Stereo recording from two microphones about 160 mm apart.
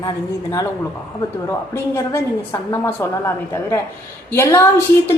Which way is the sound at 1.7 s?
15° left (ahead or behind).